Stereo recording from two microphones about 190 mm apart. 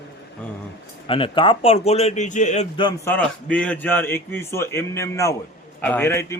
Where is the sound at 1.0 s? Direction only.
25° left (ahead or behind).